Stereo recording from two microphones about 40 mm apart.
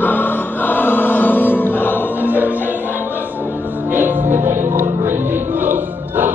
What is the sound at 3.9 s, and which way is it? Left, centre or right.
Music, right.